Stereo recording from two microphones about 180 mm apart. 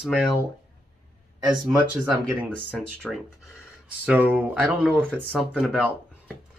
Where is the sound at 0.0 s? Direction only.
5° right (ahead or behind).